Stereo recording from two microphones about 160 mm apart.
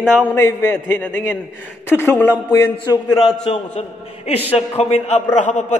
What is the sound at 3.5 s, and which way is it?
A man's voice, 35° left (ahead or behind).